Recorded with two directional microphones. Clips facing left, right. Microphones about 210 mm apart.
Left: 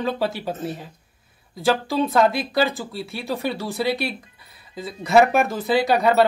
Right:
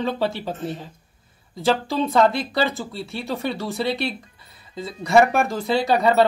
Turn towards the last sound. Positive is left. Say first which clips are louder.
# even
turn(degrees=0)  # may be behind; listen again after turning